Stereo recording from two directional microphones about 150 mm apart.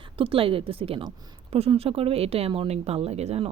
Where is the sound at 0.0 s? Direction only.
35° right (ahead or behind).